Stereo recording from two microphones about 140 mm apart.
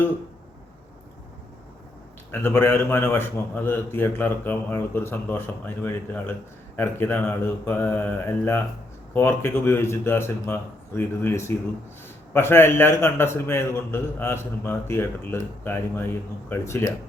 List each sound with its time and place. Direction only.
2.3 s a man's voice: 15° left (ahead or behind)